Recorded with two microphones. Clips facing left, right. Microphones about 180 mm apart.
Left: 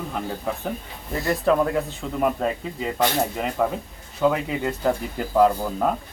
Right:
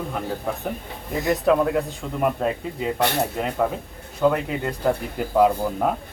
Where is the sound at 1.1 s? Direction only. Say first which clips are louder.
Right 2 dB; 20° right (ahead or behind).